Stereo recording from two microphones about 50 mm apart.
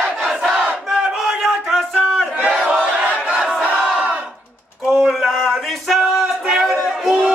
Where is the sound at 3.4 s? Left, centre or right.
Centre.